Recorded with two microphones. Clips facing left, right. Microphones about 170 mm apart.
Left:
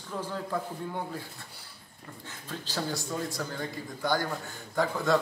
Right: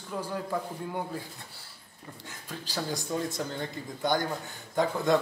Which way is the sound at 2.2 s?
10° right (ahead or behind).